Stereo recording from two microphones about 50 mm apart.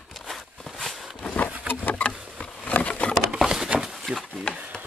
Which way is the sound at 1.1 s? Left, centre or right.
Centre.